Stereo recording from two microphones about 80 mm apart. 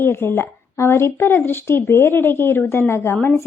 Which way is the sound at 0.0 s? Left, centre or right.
Left.